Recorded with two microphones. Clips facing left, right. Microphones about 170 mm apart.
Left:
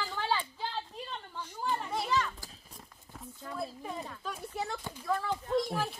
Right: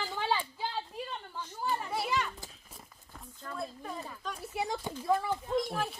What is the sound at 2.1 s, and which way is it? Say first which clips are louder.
Speech: left 2 dB; 15° right (ahead or behind).